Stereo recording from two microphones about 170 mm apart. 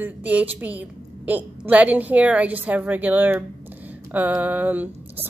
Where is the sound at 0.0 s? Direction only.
10° right (ahead or behind).